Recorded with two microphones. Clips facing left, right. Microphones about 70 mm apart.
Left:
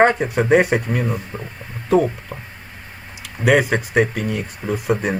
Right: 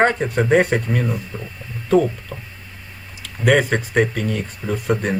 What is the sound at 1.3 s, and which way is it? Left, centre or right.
Speech, left.